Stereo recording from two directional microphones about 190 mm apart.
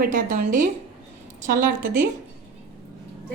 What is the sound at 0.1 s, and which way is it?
A woman's voice, 45° right (ahead or behind).